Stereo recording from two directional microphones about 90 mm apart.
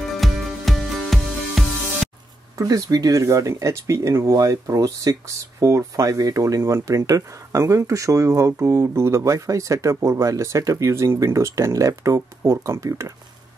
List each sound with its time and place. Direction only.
0.1 s music: centre (ahead or behind)
2.5 s speech: 40° right (ahead or behind)